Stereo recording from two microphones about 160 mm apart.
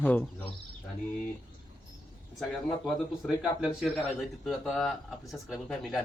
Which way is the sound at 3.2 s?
Centre (ahead or behind).